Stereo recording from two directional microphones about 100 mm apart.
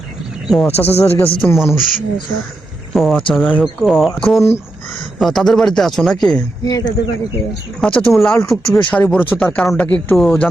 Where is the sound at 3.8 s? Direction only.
Centre (ahead or behind).